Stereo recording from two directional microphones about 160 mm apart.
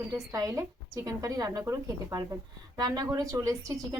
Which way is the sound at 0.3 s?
20° right (ahead or behind).